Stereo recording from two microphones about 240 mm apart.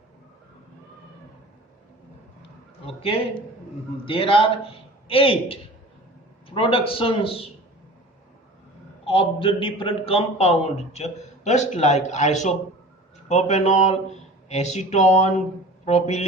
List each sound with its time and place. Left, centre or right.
2.8 s a man's voice: left
9.0 s a man's voice: left